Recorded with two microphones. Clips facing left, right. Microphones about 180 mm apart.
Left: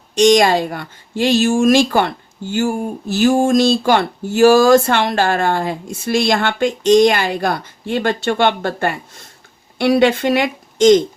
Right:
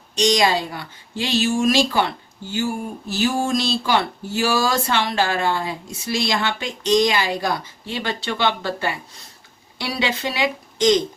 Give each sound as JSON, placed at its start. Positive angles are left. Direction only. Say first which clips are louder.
{"t": 0.2, "sound": "speech", "louder": "left 7 dB", "side_deg": 55}